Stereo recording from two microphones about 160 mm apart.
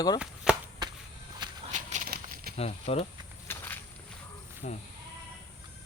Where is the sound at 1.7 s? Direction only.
45° right (ahead or behind).